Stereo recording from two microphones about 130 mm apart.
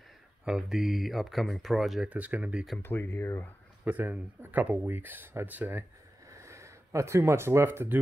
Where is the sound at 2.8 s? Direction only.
15° left (ahead or behind).